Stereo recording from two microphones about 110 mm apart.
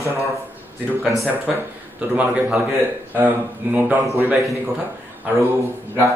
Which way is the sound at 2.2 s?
5° right (ahead or behind).